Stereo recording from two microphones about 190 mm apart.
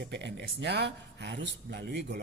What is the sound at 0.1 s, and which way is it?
A woman's voice, 65° right (ahead or behind).